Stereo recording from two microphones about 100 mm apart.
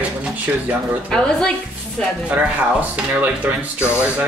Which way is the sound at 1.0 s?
10° left (ahead or behind).